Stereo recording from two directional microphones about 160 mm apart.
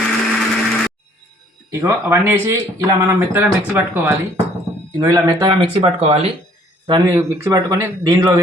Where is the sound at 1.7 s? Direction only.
15° right (ahead or behind); by 6.1 s 40° right (ahead or behind).